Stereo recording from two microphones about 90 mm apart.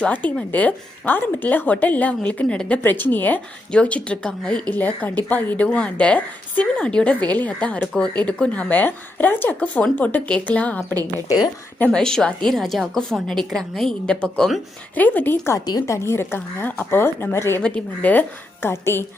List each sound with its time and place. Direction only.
0.0 s a woman's voice: 15° left (ahead or behind)
14.9 s a woman's voice: 20° left (ahead or behind)
15.5 s a woman's voice: 40° left (ahead or behind)
16.0 s a woman's voice: 25° left (ahead or behind)
17.6 s speech: 15° left (ahead or behind)
18.7 s a woman's voice: 30° left (ahead or behind)